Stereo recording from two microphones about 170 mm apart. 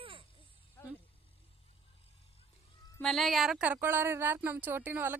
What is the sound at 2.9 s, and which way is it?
Speech, centre (ahead or behind).